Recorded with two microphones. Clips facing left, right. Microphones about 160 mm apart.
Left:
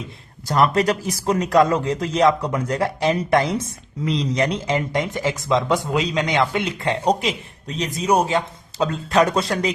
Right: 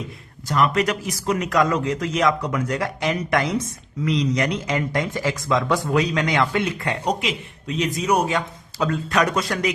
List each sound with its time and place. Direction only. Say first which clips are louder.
0.4 s a man's voice: left 2 dB; 35° left (ahead or behind)